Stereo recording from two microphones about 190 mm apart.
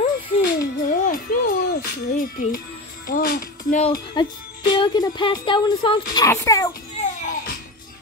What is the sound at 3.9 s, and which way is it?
Speech, 25° left (ahead or behind).